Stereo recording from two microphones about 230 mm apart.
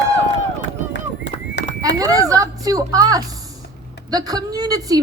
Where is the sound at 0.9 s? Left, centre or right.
Left.